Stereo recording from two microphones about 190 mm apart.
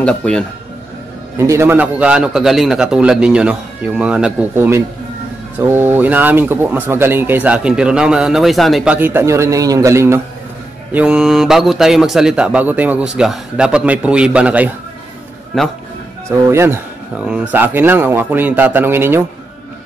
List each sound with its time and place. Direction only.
0.0 s a man's voice: 5° left (ahead or behind)
1.4 s a man's voice: 15° right (ahead or behind); by 15.7 s centre (ahead or behind)
16.3 s speech: 15° right (ahead or behind)